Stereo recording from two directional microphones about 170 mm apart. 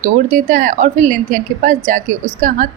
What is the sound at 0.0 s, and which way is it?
A woman's voice, 50° right (ahead or behind).